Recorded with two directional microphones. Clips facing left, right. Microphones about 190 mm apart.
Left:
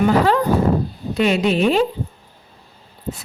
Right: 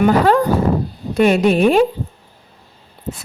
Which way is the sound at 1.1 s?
50° right (ahead or behind).